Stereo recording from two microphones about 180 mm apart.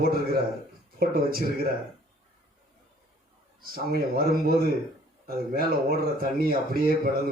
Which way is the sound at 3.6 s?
55° right (ahead or behind).